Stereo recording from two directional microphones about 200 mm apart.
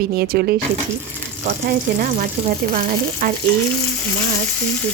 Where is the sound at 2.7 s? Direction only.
45° right (ahead or behind).